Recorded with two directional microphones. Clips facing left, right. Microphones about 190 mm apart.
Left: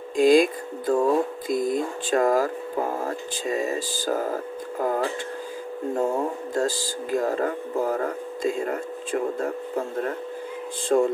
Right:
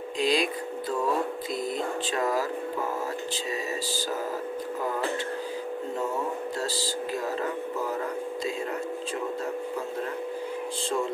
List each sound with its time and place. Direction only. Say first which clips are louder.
0.2 s speech: left 9 dB; 50° left (ahead or behind)